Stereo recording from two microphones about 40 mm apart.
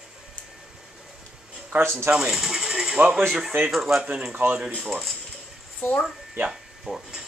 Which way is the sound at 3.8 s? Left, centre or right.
Centre.